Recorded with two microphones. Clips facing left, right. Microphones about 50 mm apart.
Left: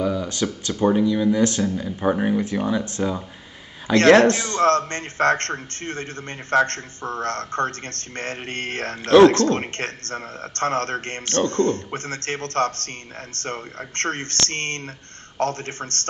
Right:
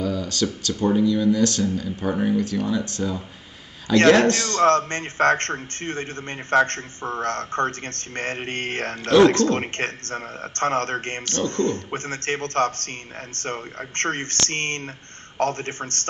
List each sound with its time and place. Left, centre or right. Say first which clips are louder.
0.0 s speech: left 1 dB; centre
4.6 s speech: right 1 dB; right
6.5 s speech: even; right
9.0 s speech: left 3 dB; left
9.6 s speech: right 2 dB; right
11.2 s speech: left 4 dB; left
11.7 s speech: left 1 dB; right